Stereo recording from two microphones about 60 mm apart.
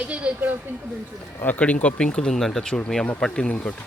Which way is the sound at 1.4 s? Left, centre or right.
Left.